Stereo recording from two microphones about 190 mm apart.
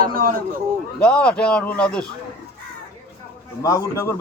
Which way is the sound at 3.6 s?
15° left (ahead or behind).